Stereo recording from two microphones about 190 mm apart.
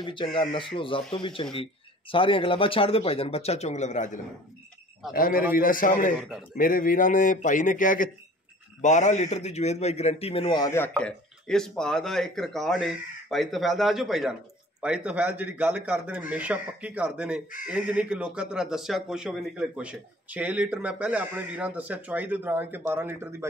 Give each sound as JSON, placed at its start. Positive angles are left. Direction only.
{"t": 0.0, "sound": "a man's voice", "side_deg": 25}
{"t": 10.9, "sound": "speech", "side_deg": 5}